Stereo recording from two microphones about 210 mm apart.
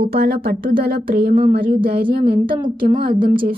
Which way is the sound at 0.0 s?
45° right (ahead or behind).